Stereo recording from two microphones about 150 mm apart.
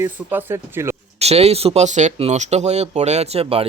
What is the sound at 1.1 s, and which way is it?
Speech, 45° right (ahead or behind).